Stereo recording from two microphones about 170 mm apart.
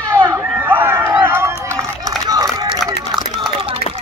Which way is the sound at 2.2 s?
25° right (ahead or behind).